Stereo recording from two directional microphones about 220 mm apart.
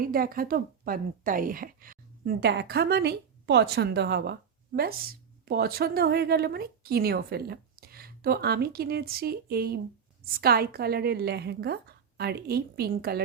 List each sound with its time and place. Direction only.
0.0 s a woman's voice: 40° right (ahead or behind)